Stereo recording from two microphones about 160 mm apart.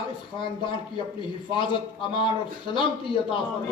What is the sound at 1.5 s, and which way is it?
Speech, 30° left (ahead or behind).